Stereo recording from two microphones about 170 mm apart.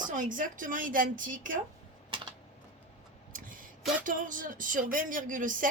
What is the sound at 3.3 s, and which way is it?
Speech, 55° right (ahead or behind).